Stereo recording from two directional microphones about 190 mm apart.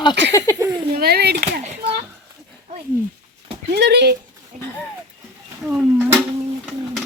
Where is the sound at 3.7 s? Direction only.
60° right (ahead or behind).